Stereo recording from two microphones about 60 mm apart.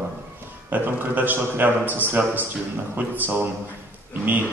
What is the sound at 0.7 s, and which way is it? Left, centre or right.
A man's voice, right.